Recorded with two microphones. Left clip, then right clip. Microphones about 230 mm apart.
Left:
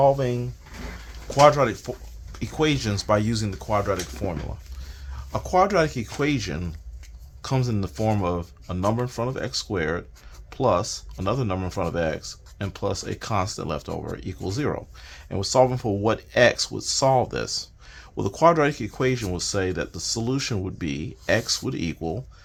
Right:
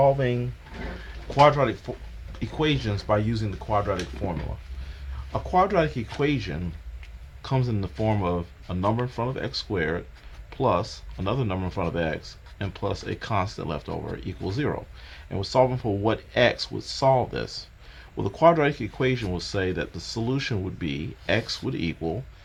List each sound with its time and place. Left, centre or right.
0.0 s speech: centre
1.3 s speech: left